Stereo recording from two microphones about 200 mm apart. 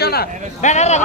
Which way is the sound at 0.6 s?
35° left (ahead or behind).